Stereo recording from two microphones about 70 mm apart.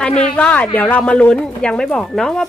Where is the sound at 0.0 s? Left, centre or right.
Centre.